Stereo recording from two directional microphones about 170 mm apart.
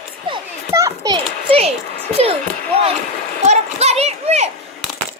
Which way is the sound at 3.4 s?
40° right (ahead or behind).